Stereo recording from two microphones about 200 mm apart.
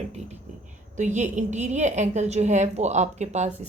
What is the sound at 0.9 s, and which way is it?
A woman's voice, 35° right (ahead or behind).